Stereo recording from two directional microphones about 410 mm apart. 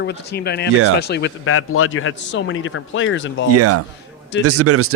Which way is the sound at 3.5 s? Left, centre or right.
Right.